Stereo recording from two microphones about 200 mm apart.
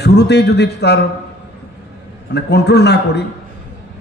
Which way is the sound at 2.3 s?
55° left (ahead or behind).